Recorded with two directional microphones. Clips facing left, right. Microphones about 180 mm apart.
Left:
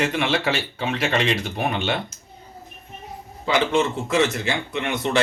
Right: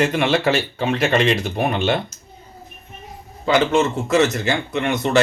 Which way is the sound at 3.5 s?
45° right (ahead or behind).